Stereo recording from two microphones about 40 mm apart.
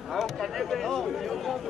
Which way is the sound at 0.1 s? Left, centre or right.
Centre.